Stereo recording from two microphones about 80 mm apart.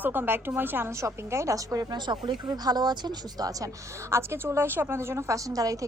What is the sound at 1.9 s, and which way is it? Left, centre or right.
Speech, right.